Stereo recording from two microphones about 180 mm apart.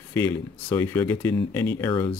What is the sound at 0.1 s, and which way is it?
Speech, 10° left (ahead or behind).